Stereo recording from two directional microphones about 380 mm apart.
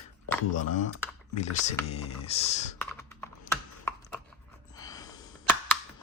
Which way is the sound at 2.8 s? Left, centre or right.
Centre.